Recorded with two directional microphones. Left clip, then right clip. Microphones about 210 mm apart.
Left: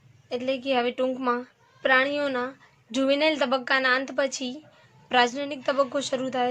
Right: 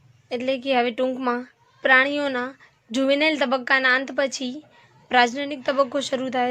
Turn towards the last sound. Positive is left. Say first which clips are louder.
# right 3 dB
turn(degrees=-30)  # may be behind; listen again after turning